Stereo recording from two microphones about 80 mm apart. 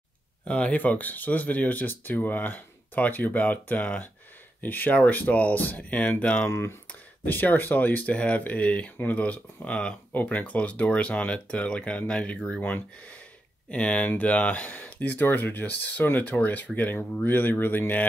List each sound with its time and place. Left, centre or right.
0.5 s speech: centre
6.4 s speech: left
6.9 s speech: left